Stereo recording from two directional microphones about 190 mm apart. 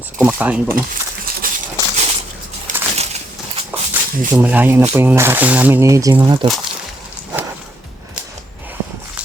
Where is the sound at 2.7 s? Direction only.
40° right (ahead or behind).